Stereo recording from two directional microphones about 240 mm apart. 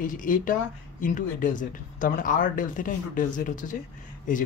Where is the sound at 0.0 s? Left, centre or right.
Left.